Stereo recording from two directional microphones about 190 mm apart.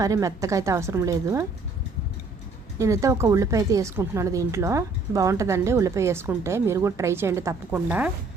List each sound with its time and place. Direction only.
0.0 s speech: 15° right (ahead or behind)
2.7 s speech: 15° right (ahead or behind)